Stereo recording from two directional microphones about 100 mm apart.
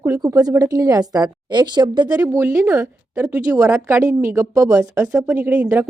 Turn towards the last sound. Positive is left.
turn(degrees=-15)  # may be behind; listen again after turning